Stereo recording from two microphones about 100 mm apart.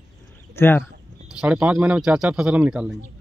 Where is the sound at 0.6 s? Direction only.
25° left (ahead or behind).